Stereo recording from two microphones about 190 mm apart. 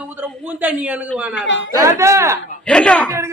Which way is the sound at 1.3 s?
70° left (ahead or behind).